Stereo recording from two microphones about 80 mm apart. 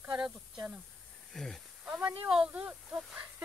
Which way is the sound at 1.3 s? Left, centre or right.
Centre.